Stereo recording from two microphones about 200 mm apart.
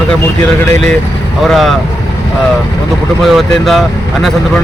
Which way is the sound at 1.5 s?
Centre (ahead or behind).